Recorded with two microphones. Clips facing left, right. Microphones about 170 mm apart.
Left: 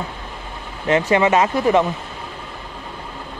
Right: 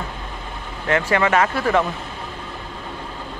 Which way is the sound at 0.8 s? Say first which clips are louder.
Left 3 dB; 20° left (ahead or behind).